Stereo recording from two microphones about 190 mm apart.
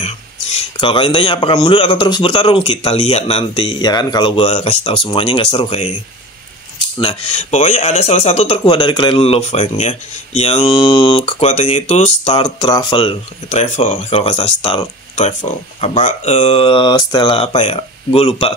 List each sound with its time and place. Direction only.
0.7 s speech: 25° left (ahead or behind)
4.5 s speech: 35° left (ahead or behind)
7.0 s speech: 35° left (ahead or behind)
12.6 s speech: 25° left (ahead or behind)